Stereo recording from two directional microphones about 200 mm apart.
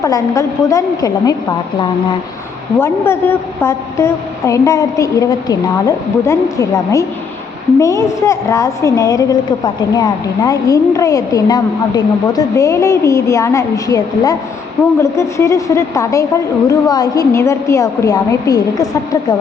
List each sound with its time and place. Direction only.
0.0 s a woman's voice: 15° left (ahead or behind)